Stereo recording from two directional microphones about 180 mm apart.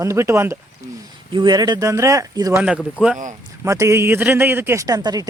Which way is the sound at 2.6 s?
5° right (ahead or behind).